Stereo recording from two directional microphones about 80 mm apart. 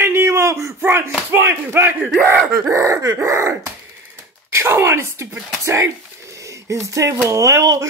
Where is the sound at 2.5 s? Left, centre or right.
Right.